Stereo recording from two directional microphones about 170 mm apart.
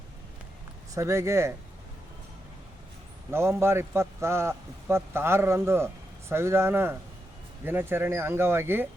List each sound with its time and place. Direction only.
0.9 s a man's voice: 15° right (ahead or behind)
3.3 s a man's voice: 15° right (ahead or behind)